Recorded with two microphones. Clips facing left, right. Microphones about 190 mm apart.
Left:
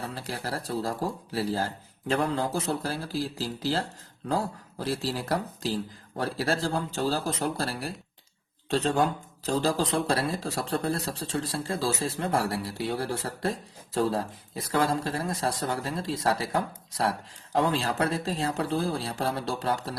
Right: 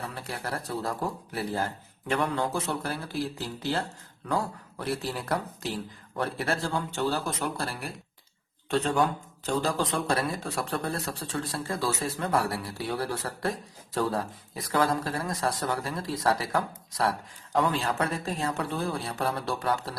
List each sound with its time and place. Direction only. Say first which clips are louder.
0.0 s speech: left 1 dB; 30° left (ahead or behind)
4.3 s speech: left 1 dB; 30° left (ahead or behind)